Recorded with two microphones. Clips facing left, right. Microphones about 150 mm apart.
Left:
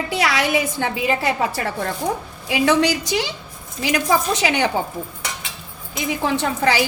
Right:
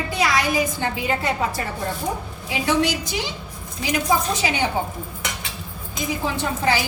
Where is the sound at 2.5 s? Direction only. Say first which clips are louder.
Left 4 dB; 90° left.